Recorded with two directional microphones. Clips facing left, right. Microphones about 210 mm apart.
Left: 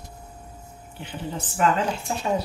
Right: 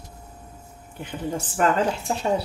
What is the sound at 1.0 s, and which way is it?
Speech, 45° right (ahead or behind).